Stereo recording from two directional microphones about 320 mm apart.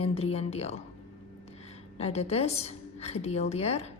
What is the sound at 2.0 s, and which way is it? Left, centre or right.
A woman's voice, centre.